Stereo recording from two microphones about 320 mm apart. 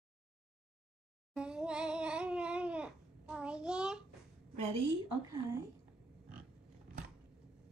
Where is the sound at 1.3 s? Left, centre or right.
Centre.